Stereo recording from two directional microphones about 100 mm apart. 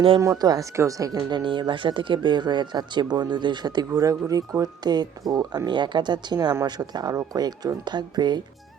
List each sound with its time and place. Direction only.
0.2 s speech: 35° right (ahead or behind)